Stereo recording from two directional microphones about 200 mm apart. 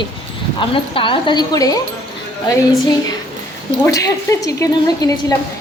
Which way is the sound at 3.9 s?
15° left (ahead or behind).